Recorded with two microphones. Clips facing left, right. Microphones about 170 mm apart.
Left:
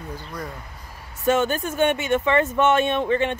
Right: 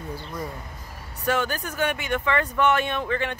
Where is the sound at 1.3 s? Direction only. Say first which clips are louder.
Left 5 dB; 25° left (ahead or behind).